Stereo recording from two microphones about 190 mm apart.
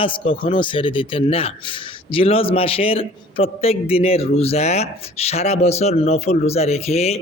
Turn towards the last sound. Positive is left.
turn(degrees=35)  # may be behind; listen again after turning